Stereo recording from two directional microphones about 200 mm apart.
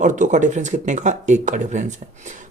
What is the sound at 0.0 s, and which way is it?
Speech, 40° right (ahead or behind).